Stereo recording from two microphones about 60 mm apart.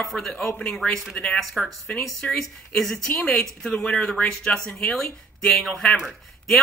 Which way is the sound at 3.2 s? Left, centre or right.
Centre.